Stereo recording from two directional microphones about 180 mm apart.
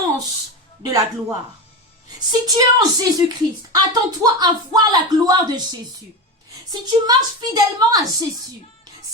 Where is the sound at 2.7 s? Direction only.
20° right (ahead or behind).